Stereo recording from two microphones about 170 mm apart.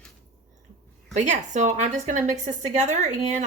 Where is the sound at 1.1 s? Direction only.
45° right (ahead or behind).